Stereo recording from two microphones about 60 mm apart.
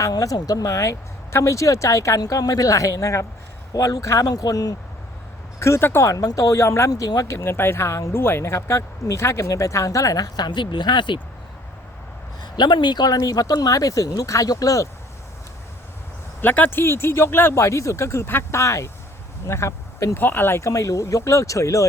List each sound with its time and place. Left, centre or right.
0.0 s speech: left
3.7 s speech: left
4.0 s speech: left
5.5 s speech: left
6.1 s speech: left
7.4 s speech: left
8.1 s speech: left
13.1 s speech: left
16.4 s speech: left
17.6 s speech: left
18.6 s speech: left
20.1 s speech: left
20.6 s speech: left